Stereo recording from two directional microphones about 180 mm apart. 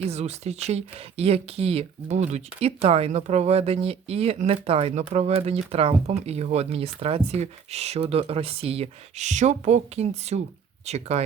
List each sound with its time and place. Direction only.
0.0 s speech: 35° right (ahead or behind)